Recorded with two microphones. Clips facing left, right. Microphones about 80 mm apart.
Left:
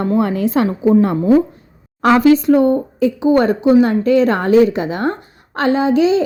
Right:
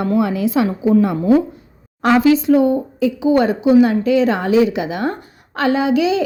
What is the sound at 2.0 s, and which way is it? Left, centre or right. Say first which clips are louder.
A woman's voice: left 2 dB; left.